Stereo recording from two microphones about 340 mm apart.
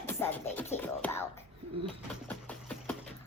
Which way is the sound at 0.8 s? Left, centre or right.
Centre.